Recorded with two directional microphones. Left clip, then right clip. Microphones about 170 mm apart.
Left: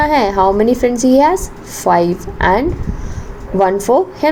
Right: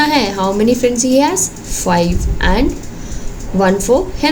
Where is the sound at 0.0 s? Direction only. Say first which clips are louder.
Left 2 dB; 20° left (ahead or behind).